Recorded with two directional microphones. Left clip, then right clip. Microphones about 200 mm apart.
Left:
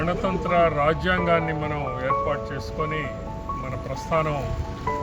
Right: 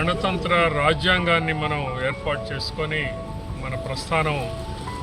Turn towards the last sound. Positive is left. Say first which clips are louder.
# right 1 dB
turn(degrees=-15)  # may be behind; listen again after turning